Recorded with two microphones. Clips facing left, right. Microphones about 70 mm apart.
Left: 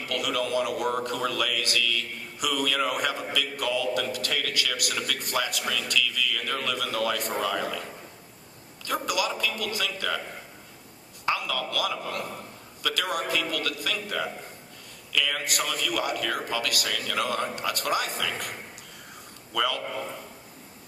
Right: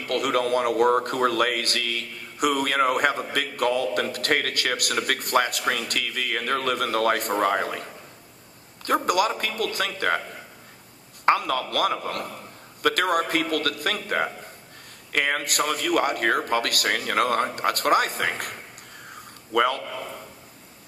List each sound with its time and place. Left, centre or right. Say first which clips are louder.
0.0 s a man's voice: right 5 dB; right
9.0 s a man's voice: right 5 dB; right
11.3 s a man's voice: right 7 dB; right
19.1 s a sound: right 7 dB; right